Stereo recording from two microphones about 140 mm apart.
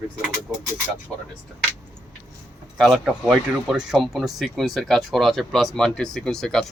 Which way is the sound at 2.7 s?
Centre (ahead or behind).